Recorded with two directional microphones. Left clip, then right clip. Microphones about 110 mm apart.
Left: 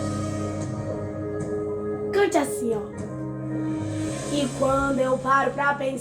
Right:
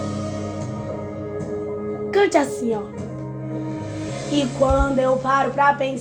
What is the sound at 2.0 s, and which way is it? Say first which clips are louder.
Music: right 4 dB; 45° right (ahead or behind).